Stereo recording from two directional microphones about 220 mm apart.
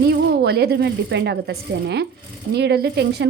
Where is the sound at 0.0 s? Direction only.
45° right (ahead or behind).